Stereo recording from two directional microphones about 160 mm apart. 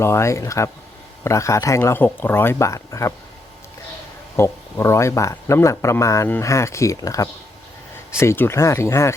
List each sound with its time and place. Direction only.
0.0 s speech: 15° left (ahead or behind)
4.4 s speech: 15° left (ahead or behind)